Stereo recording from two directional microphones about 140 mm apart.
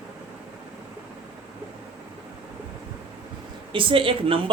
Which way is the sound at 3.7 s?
40° right (ahead or behind).